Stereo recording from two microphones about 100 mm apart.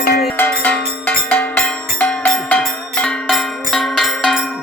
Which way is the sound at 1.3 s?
15° left (ahead or behind).